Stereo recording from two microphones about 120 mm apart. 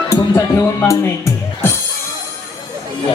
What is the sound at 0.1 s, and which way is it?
Speech, 25° left (ahead or behind).